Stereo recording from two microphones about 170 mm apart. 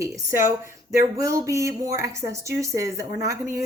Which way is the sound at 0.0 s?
15° right (ahead or behind).